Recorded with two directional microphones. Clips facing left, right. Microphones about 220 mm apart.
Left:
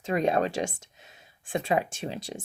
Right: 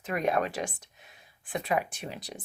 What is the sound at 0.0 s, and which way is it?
Speech, 25° left (ahead or behind).